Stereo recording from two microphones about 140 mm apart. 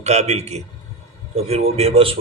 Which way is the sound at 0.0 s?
50° right (ahead or behind).